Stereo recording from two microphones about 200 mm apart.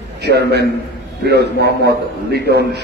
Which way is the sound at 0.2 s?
55° right (ahead or behind).